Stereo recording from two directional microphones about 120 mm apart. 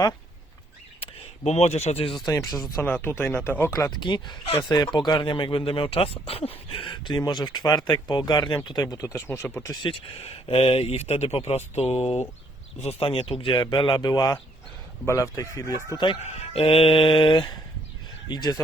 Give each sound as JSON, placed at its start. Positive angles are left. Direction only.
{"t": 1.5, "sound": "speech", "side_deg": 65}
{"t": 2.2, "sound": "speech", "side_deg": 30}
{"t": 2.8, "sound": "speech", "side_deg": 15}
{"t": 4.0, "sound": "speech", "side_deg": 40}
{"t": 9.8, "sound": "speech", "side_deg": 50}
{"t": 16.2, "sound": "speech", "side_deg": 50}